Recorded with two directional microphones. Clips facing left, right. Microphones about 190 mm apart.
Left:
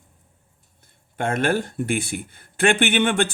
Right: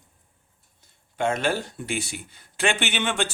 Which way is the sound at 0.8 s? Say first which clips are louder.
Right 1 dB; 55° left (ahead or behind).